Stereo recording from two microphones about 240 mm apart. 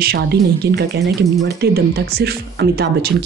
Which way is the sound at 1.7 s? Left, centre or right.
Right.